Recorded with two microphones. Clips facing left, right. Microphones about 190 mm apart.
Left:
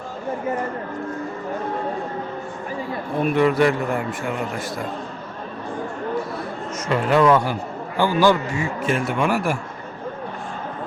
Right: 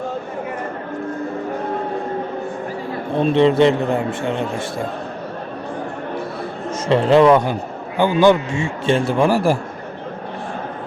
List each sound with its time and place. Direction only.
3.2 s a man's voice: 25° right (ahead or behind)
6.8 s a man's voice: 25° right (ahead or behind)